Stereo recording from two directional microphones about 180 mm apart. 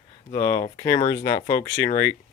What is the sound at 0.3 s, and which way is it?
Speech, 15° left (ahead or behind).